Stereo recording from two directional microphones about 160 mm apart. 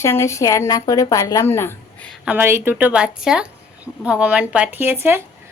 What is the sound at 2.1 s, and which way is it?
A woman's voice, 10° right (ahead or behind).